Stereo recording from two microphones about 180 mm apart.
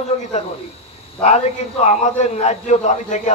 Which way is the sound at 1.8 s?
40° left (ahead or behind).